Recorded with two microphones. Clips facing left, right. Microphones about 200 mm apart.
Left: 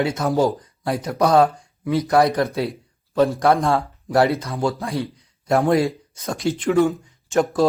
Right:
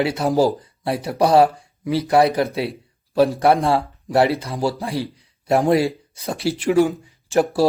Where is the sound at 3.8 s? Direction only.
Centre (ahead or behind).